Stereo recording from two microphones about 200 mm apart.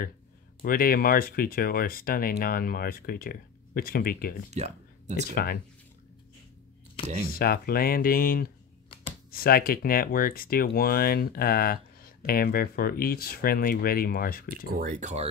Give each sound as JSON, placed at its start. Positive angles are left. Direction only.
{"t": 0.6, "sound": "speech", "side_deg": 45}
{"t": 4.5, "sound": "speech", "side_deg": -35}
{"t": 5.3, "sound": "speech", "side_deg": 50}
{"t": 7.2, "sound": "speech", "side_deg": 50}
{"t": 14.7, "sound": "speech", "side_deg": -45}